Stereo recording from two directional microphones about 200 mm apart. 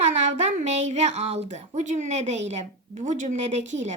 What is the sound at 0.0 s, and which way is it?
A woman's voice, 35° right (ahead or behind).